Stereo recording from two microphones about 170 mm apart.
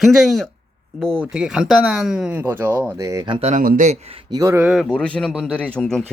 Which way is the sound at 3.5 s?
50° right (ahead or behind).